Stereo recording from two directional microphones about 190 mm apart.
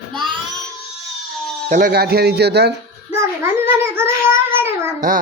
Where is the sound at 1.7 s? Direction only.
50° right (ahead or behind).